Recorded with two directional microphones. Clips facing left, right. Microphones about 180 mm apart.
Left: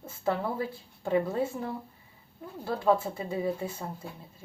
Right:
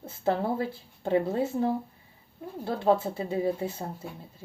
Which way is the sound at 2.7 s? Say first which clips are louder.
Right 1 dB; 25° right (ahead or behind).